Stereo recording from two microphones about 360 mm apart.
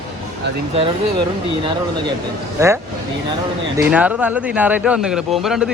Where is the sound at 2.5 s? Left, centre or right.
Centre.